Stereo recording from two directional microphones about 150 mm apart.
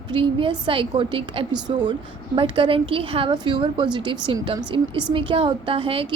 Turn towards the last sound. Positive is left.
turn(degrees=-35)  # may be behind; listen again after turning